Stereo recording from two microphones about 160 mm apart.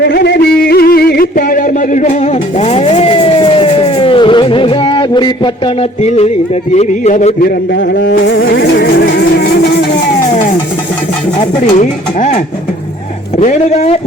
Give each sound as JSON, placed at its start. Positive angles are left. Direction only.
{"t": 0.0, "sound": "a sound", "side_deg": 90}
{"t": 6.0, "sound": "music", "side_deg": 40}
{"t": 6.7, "sound": "speech", "side_deg": 45}
{"t": 7.9, "sound": "music", "side_deg": 70}
{"t": 11.6, "sound": "speech", "side_deg": 50}
{"t": 13.4, "sound": "speech", "side_deg": 45}